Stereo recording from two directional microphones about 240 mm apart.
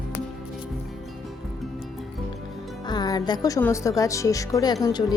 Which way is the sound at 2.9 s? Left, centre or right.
Centre.